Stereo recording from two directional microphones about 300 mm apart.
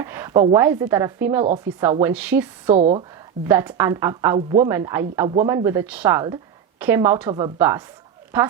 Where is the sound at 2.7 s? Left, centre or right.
Right.